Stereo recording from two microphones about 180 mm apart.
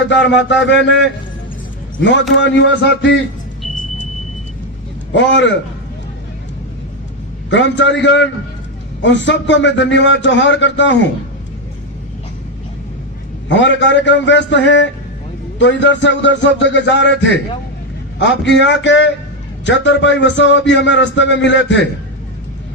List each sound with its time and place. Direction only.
0.1 s a man's voice: 80° left
2.0 s a man's voice: 90° left
7.5 s a man's voice: 90° left
13.5 s a man's voice: 85° left